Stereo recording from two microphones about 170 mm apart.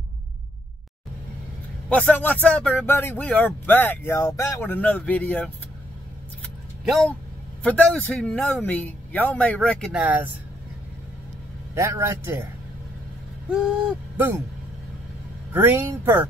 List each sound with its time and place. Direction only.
1.9 s speech: 10° left (ahead or behind)
6.4 s keys jangling: centre (ahead or behind)
7.6 s speech: 10° left (ahead or behind)
9.9 s a man's voice: 10° right (ahead or behind)
11.7 s a man's voice: 15° right (ahead or behind)
14.1 s speech: 15° right (ahead or behind)
15.5 s a man's voice: 15° right (ahead or behind)